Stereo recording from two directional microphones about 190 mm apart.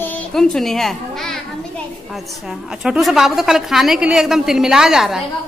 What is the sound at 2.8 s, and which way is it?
A woman's voice, centre (ahead or behind).